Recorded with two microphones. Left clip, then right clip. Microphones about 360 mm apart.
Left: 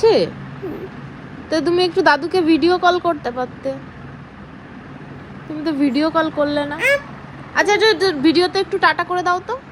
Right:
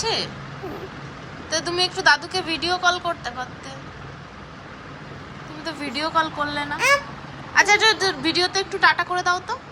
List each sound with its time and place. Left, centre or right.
0.0 s speech: centre
1.5 s speech: centre
5.6 s speech: centre